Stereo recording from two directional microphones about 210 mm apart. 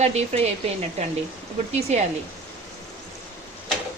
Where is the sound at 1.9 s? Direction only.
30° right (ahead or behind).